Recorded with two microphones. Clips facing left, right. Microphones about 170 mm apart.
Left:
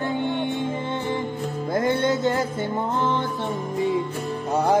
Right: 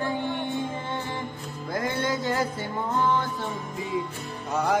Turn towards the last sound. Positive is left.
turn(degrees=30)  # may be behind; listen again after turning